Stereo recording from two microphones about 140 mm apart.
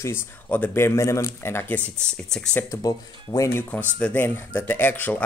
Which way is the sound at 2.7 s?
25° left (ahead or behind).